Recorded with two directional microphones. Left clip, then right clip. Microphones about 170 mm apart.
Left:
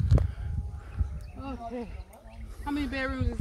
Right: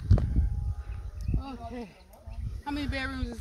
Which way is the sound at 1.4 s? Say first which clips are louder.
Left 3 dB; 50° right (ahead or behind).